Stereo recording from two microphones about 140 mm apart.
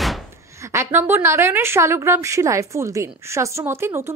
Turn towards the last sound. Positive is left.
turn(degrees=-20)  # may be behind; listen again after turning